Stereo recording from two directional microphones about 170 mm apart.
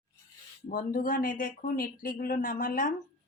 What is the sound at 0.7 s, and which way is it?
Speech, 55° left (ahead or behind).